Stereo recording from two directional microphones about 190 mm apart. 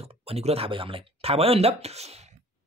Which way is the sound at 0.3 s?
30° right (ahead or behind).